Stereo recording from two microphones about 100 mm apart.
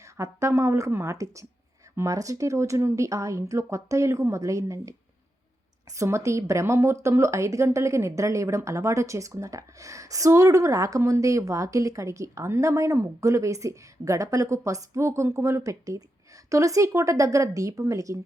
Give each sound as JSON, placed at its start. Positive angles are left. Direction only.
{"t": 0.0, "sound": "speech", "side_deg": -30}